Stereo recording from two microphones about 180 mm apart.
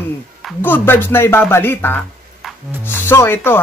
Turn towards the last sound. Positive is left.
turn(degrees=10)  # may be behind; listen again after turning